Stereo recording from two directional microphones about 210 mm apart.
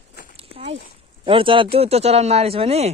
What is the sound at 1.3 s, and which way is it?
Speech, 25° right (ahead or behind).